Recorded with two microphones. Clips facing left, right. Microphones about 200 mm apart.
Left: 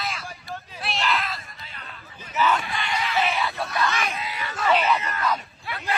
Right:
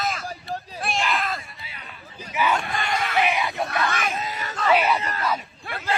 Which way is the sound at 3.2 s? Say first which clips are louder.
Right 2 dB; 15° right (ahead or behind).